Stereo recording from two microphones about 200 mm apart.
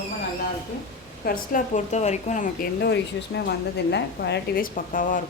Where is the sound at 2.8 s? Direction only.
60° left (ahead or behind).